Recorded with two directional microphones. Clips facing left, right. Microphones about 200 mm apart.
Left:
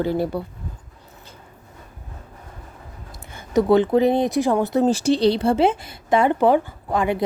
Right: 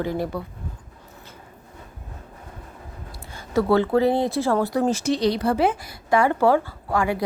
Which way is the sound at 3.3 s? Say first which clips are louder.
Left 3 dB; 20° left (ahead or behind).